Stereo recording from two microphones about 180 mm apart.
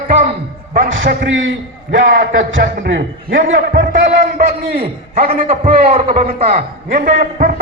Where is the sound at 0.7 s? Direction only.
75° right (ahead or behind).